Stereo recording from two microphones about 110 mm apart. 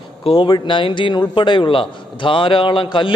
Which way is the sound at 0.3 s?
50° left (ahead or behind).